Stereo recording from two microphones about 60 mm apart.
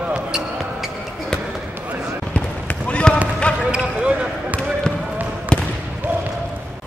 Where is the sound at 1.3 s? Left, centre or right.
Centre.